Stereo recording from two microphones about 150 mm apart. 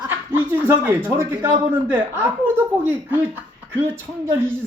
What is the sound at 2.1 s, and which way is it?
Speech, 10° right (ahead or behind).